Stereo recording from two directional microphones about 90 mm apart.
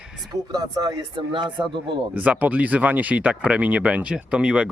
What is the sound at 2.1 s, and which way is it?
Speech, 15° right (ahead or behind).